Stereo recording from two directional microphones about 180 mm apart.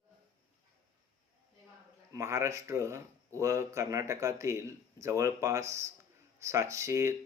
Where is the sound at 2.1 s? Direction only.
15° right (ahead or behind).